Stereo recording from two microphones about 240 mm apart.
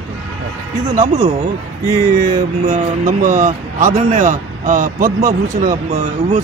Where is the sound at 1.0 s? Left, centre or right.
Right.